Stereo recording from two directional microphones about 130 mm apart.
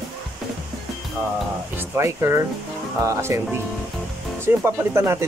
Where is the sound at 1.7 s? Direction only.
20° right (ahead or behind).